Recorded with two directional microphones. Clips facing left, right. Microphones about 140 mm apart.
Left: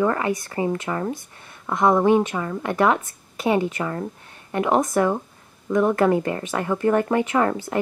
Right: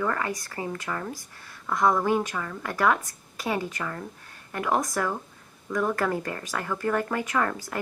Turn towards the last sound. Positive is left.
turn(degrees=25)  # may be behind; listen again after turning